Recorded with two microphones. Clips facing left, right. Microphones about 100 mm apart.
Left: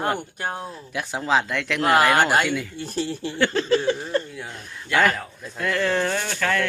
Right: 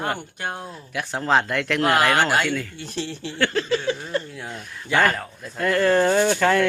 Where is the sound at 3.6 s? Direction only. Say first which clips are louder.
Left 3 dB; 40° left (ahead or behind).